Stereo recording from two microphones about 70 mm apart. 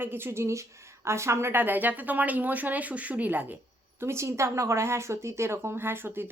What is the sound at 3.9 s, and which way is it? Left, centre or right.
A woman's voice, right.